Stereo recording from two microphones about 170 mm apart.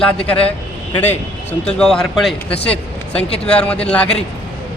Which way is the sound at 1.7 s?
5° left (ahead or behind).